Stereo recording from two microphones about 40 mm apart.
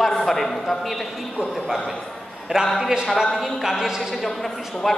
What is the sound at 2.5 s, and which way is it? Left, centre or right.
Speech, centre.